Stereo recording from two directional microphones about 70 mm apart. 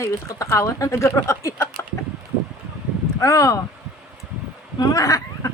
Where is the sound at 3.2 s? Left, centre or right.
Left.